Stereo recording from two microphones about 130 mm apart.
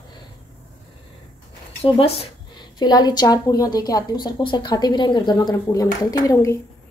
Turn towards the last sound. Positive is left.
turn(degrees=25)  # may be behind; listen again after turning